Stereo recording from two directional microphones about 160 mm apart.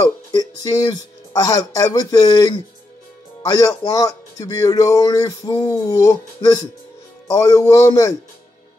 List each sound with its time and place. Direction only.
0.0 s speech: 25° left (ahead or behind)